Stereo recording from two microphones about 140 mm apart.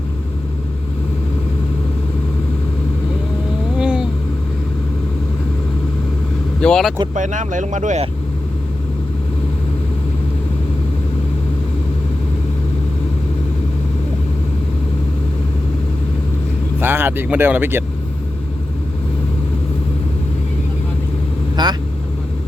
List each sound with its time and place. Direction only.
3.8 s vehicle: 5° right (ahead or behind)
6.6 s vehicle: 5° left (ahead or behind)
7.1 s speech: 65° right (ahead or behind)
16.8 s speech: 15° right (ahead or behind)
21.5 s vehicle: 30° right (ahead or behind)